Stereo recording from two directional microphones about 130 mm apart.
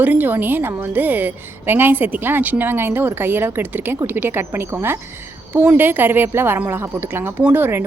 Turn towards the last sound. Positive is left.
turn(degrees=-15)  # may be behind; listen again after turning